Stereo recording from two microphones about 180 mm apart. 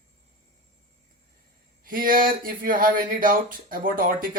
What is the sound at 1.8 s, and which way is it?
Speech, 50° right (ahead or behind).